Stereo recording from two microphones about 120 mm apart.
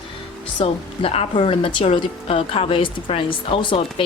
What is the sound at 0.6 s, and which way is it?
A woman's voice, 55° left (ahead or behind).